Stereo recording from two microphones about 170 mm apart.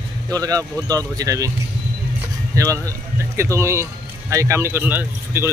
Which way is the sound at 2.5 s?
20° right (ahead or behind).